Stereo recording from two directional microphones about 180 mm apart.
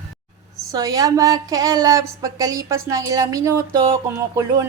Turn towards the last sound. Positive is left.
turn(degrees=-15)  # may be behind; listen again after turning